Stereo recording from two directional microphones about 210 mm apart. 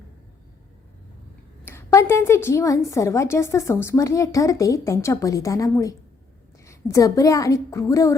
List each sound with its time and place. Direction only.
1.6 s a woman's voice: 15° left (ahead or behind)